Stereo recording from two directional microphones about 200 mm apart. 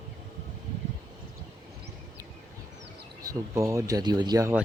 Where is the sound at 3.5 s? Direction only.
15° right (ahead or behind).